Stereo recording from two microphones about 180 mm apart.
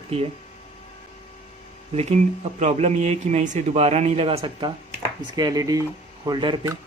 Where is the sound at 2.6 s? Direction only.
40° right (ahead or behind).